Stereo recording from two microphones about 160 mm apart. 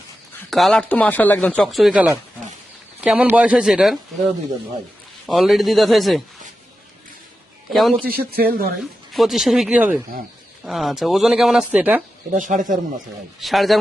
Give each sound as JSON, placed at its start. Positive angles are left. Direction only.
{"t": 0.5, "sound": "speech", "side_deg": 0}
{"t": 5.2, "sound": "speech", "side_deg": 0}
{"t": 7.7, "sound": "speech", "side_deg": 0}
{"t": 8.0, "sound": "speech", "side_deg": -70}
{"t": 8.8, "sound": "speech", "side_deg": 0}
{"t": 12.3, "sound": "speech", "side_deg": -55}
{"t": 13.4, "sound": "speech", "side_deg": 0}